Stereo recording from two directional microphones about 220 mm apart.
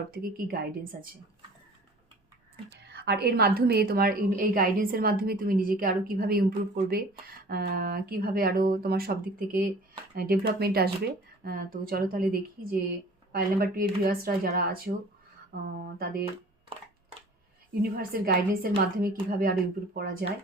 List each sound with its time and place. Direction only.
0.1 s a woman's voice: 40° right (ahead or behind)
2.6 s a woman's voice: 50° right (ahead or behind)
17.9 s a woman's voice: 45° right (ahead or behind)